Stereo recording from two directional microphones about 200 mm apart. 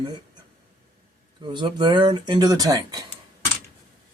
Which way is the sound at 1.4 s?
25° right (ahead or behind).